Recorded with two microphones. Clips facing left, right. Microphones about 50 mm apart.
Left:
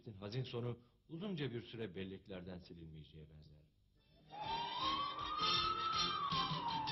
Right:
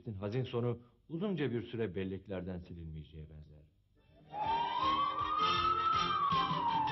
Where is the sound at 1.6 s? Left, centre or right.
Right.